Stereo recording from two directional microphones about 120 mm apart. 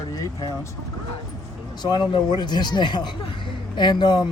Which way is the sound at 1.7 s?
35° left (ahead or behind).